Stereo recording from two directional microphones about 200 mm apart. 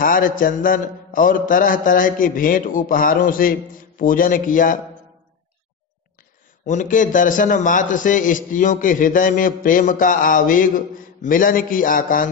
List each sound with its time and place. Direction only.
0.0 s mantra: 45° left (ahead or behind)
6.6 s a man's voice: 40° left (ahead or behind)
11.2 s mantra: 45° left (ahead or behind)